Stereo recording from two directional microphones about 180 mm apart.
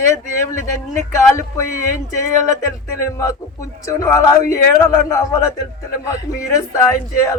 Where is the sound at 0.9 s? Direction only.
15° left (ahead or behind).